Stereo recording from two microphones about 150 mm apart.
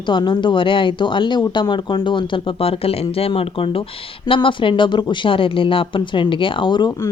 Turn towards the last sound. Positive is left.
turn(degrees=30)  # may be behind; listen again after turning